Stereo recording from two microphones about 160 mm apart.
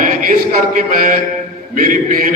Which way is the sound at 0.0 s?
55° right (ahead or behind).